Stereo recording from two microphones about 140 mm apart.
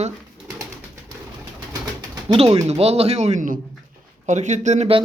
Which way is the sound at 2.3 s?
45° right (ahead or behind).